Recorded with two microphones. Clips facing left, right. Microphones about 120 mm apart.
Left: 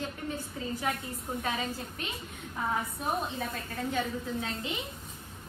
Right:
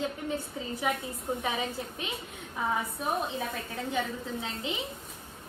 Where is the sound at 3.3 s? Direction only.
Centre (ahead or behind).